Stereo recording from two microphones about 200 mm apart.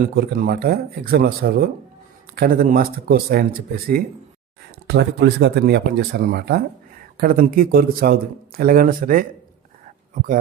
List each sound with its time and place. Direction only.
0.0 s speech: 45° right (ahead or behind)
4.9 s speech: 60° right (ahead or behind)